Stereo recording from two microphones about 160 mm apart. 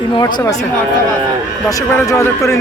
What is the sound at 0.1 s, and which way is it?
Speech, 25° left (ahead or behind).